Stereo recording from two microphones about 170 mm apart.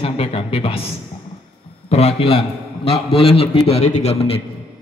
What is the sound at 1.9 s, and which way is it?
A man's voice, 35° left (ahead or behind).